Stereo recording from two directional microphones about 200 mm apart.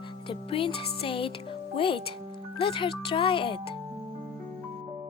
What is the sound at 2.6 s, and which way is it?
Music, 25° left (ahead or behind).